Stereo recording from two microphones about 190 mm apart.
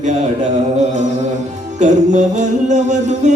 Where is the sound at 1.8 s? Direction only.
40° right (ahead or behind).